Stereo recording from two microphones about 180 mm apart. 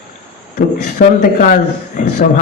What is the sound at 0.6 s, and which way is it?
A man's voice, 50° left (ahead or behind).